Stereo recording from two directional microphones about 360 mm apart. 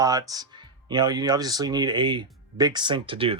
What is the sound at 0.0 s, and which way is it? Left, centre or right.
Speech, centre.